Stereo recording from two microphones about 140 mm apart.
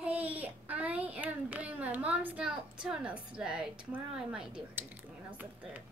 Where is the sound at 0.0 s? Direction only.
10° right (ahead or behind).